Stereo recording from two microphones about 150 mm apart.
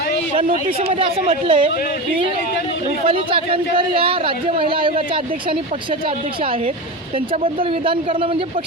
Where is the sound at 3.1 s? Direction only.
35° right (ahead or behind).